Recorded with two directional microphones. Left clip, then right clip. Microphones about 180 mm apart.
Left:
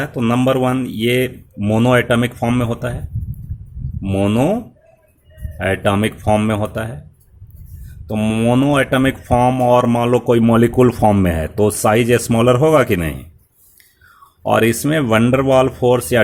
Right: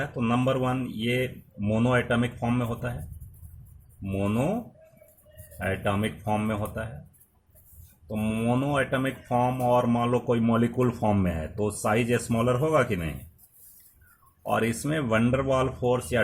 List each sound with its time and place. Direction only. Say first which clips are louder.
0.0 s speech: left 10 dB; 45° left (ahead or behind)
4.0 s speech: left 12 dB; 45° left (ahead or behind)
5.5 s speech: left 11 dB; 50° left (ahead or behind)
8.0 s speech: left 11 dB; 45° left (ahead or behind)
14.4 s speech: left 12 dB; 45° left (ahead or behind)